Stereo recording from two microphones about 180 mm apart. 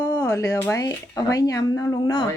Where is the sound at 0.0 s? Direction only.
15° left (ahead or behind).